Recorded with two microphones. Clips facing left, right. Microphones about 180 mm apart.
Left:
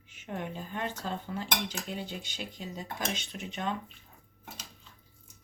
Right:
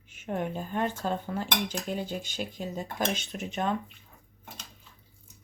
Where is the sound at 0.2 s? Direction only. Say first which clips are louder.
Right 6 dB; 50° right (ahead or behind).